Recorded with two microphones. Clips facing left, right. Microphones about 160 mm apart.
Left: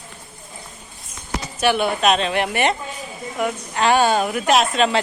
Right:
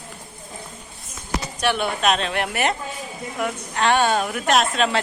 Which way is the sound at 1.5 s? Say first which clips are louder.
Left 5 dB; 5° left (ahead or behind).